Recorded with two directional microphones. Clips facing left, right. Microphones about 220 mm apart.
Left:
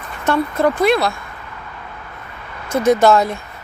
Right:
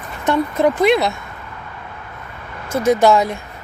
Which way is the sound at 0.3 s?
20° right (ahead or behind).